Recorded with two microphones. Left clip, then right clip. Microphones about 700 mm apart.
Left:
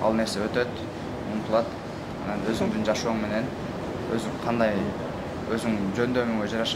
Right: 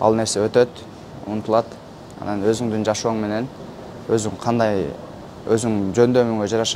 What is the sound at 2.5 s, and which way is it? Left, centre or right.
Speech, right.